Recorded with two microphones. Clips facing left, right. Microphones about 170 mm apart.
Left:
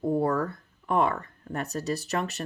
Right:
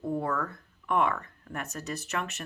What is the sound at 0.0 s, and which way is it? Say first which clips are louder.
Speech: left 5 dB; 35° left (ahead or behind).